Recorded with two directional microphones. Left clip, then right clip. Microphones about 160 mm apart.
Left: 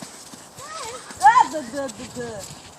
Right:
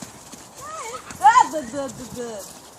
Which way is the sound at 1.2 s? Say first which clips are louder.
Even; 30° left (ahead or behind).